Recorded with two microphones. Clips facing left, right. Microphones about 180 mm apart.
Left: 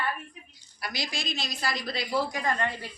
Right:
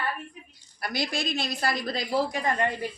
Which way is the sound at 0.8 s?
55° right (ahead or behind).